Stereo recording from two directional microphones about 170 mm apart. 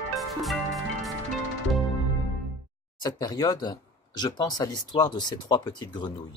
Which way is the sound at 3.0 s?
20° left (ahead or behind).